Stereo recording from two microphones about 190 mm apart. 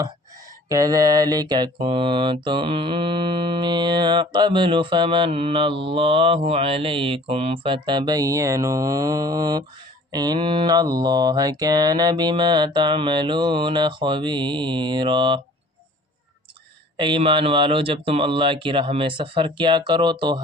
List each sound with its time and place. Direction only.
0.7 s mantra: 20° right (ahead or behind)
17.0 s mantra: 25° right (ahead or behind)